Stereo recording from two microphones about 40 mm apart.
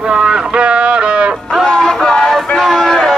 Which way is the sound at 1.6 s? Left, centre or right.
Centre.